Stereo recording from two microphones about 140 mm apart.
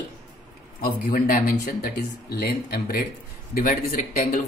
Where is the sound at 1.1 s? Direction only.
90° left.